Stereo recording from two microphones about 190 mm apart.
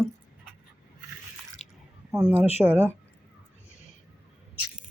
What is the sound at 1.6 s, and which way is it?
Drip, 35° left (ahead or behind).